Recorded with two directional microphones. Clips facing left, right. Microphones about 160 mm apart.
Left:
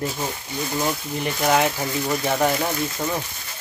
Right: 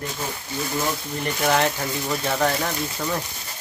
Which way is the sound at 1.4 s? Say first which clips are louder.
Left 1 dB; 10° left (ahead or behind).